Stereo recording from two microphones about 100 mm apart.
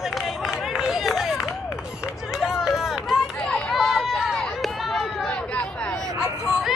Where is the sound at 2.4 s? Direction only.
5° right (ahead or behind).